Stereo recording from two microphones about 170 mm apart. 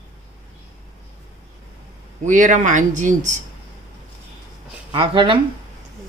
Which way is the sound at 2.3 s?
50° right (ahead or behind).